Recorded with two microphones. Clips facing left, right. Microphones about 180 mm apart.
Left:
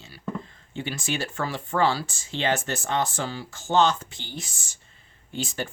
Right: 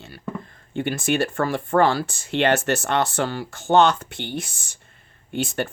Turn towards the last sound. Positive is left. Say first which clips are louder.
# right 6 dB
turn(degrees=-60)  # may be behind; listen again after turning